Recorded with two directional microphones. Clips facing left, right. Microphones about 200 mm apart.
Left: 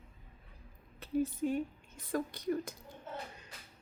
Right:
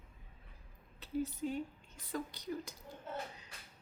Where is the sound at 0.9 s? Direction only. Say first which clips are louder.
Left 5 dB; 50° left (ahead or behind).